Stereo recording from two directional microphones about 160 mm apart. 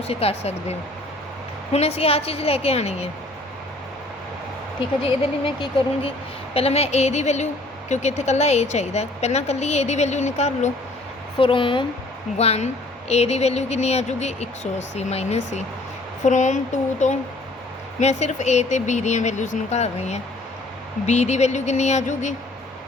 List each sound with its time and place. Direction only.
0.1 s a woman's voice: 40° left (ahead or behind)
5.0 s a woman's voice: 35° left (ahead or behind)
11.3 s a woman's voice: 30° left (ahead or behind)
12.4 s speech: 40° left (ahead or behind)